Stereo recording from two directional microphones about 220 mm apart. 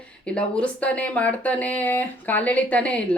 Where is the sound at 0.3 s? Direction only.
5° left (ahead or behind).